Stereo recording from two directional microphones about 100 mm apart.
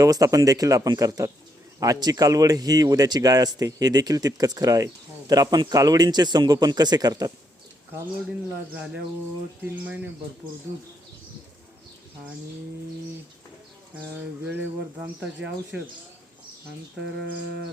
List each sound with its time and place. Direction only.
0.0 s speech: 35° right (ahead or behind)
9.6 s speech: 15° right (ahead or behind)
14.4 s speech: 15° right (ahead or behind)